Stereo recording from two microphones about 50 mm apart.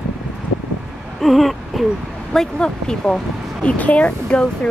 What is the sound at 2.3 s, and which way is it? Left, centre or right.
Speech, centre.